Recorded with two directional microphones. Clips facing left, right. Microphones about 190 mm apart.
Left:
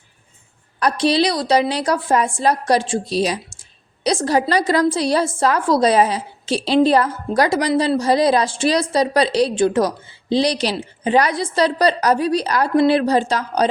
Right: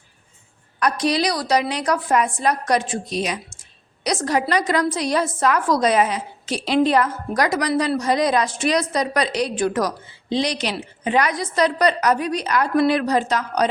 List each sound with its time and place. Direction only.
0.8 s a woman's voice: 30° left (ahead or behind)